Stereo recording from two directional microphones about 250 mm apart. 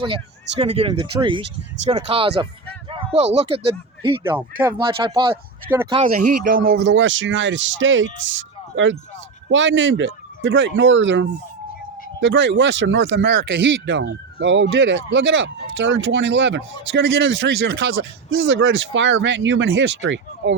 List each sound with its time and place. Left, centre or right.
0.6 s speech: right
6.1 s speech: right